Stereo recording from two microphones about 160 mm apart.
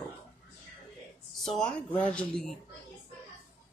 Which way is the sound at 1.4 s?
5° left (ahead or behind).